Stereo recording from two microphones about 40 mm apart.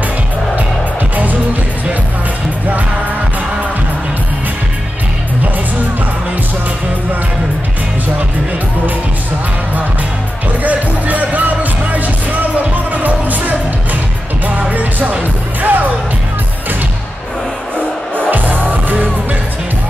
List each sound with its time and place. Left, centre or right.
10.6 s music: right
14.6 s music: right
18.3 s music: right